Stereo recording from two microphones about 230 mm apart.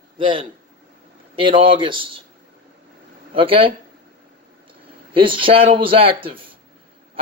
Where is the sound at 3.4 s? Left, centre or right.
Right.